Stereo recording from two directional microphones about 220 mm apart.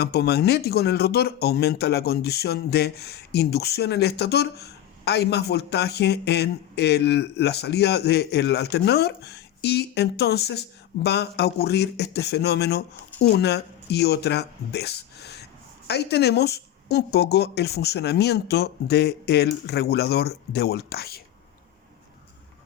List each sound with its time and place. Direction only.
0.0 s speech: 45° left (ahead or behind)